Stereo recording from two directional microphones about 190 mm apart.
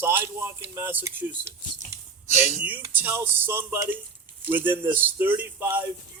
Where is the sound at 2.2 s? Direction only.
40° left (ahead or behind).